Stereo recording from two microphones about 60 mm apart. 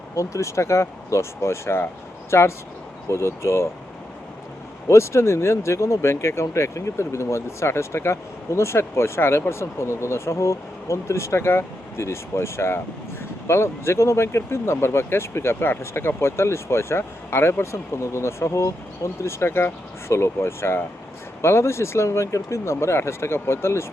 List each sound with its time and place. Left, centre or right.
0.2 s speech: left
4.9 s speech: left